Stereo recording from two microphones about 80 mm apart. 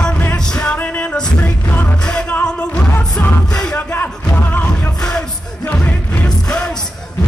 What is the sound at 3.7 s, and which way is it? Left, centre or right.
Music, left.